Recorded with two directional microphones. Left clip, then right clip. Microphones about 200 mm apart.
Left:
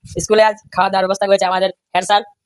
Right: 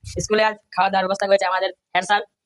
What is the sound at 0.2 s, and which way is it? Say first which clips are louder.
A woman's voice: left 7 dB; 45° left (ahead or behind).